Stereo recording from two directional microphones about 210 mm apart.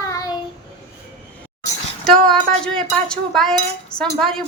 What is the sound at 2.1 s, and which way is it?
Speech, centre (ahead or behind).